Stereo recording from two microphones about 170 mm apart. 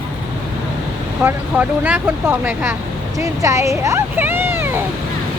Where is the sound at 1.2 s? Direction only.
10° right (ahead or behind).